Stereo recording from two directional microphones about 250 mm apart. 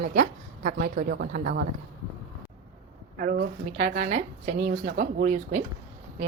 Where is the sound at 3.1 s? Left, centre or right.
Right.